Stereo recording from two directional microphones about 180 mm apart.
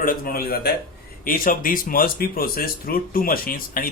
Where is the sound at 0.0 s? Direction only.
55° left (ahead or behind).